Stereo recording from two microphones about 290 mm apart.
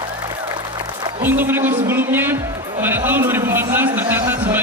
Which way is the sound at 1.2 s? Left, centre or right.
Centre.